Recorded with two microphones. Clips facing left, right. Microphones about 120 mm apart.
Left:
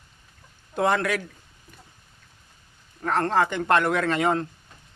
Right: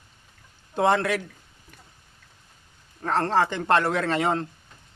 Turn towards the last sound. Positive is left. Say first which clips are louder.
# left 1 dB
turn(degrees=-30)  # may be behind; listen again after turning